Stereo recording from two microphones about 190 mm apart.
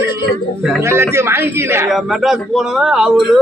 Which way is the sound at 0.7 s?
10° right (ahead or behind).